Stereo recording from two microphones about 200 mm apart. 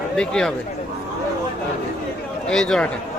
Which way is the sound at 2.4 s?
5° left (ahead or behind).